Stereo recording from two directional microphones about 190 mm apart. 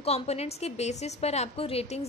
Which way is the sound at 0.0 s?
35° left (ahead or behind).